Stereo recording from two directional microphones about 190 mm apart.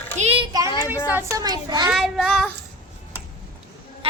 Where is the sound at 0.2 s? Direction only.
30° right (ahead or behind).